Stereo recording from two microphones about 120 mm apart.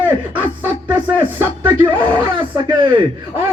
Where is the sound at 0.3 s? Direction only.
15° right (ahead or behind).